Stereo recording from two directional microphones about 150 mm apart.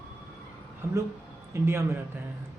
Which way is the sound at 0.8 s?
15° right (ahead or behind).